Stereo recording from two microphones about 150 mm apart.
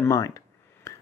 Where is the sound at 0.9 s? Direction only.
20° left (ahead or behind).